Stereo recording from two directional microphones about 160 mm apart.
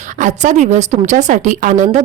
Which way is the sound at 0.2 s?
50° right (ahead or behind).